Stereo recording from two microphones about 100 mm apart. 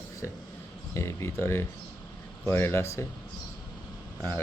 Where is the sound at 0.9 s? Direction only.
30° left (ahead or behind).